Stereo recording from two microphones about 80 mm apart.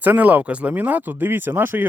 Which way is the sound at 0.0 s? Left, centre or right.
Right.